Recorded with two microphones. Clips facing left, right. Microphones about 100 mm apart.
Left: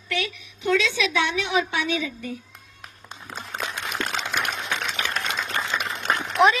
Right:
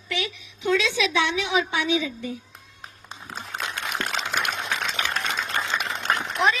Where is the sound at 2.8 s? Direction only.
30° right (ahead or behind).